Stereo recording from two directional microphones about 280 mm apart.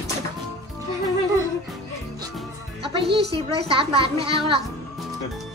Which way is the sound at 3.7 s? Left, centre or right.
Centre.